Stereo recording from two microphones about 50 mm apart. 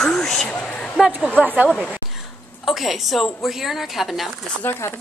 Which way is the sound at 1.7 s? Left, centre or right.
Centre.